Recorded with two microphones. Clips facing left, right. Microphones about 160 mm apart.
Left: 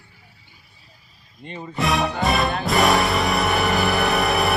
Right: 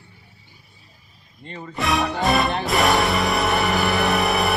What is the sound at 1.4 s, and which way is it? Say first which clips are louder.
Speech: left 1 dB; 15° left (ahead or behind).